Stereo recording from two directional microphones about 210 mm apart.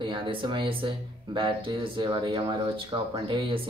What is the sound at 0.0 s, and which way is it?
Speech, 20° right (ahead or behind).